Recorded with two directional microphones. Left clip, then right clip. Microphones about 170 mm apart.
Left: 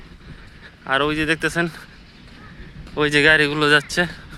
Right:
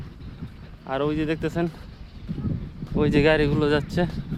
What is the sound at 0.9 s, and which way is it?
Speech, 5° right (ahead or behind).